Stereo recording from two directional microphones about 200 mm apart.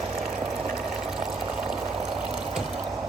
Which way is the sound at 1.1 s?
5° right (ahead or behind).